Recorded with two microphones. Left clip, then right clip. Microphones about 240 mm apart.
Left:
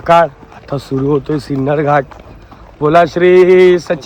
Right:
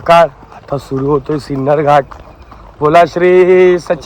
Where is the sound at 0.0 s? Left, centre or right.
Right.